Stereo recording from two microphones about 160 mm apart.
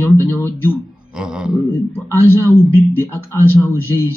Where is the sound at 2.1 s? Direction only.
15° left (ahead or behind).